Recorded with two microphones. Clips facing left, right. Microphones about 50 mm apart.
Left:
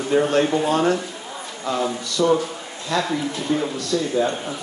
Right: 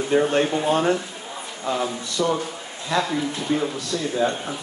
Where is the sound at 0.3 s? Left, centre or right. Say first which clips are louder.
Left 2 dB; right.